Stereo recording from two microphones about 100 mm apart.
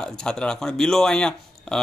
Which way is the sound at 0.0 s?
5° left (ahead or behind).